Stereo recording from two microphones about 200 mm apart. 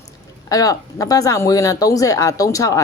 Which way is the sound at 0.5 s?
15° left (ahead or behind).